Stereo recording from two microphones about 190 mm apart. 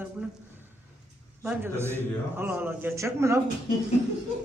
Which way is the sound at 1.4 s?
10° right (ahead or behind).